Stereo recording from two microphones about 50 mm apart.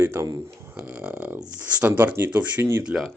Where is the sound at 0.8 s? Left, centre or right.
Right.